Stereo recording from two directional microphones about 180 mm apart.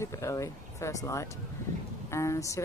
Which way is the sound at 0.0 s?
15° left (ahead or behind).